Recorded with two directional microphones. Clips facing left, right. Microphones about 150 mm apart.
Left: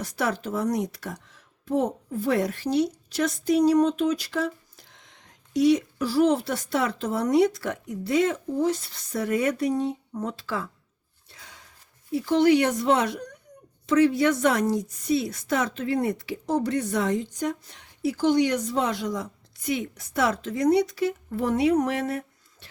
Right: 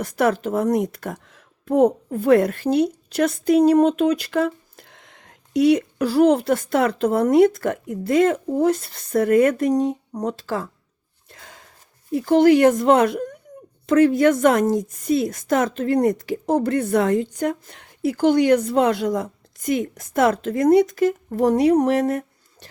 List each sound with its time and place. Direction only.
0.0 s speech: 55° right (ahead or behind)
11.3 s a sound: 50° right (ahead or behind)
12.1 s speech: 50° right (ahead or behind)